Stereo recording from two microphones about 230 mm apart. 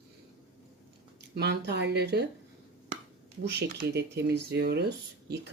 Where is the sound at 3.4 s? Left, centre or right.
Right.